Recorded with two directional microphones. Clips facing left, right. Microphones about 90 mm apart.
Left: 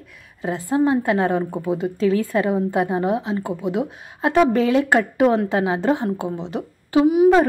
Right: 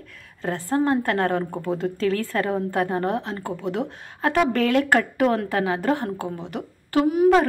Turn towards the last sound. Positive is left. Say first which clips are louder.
# left 4 dB
turn(degrees=5)  # may be behind; listen again after turning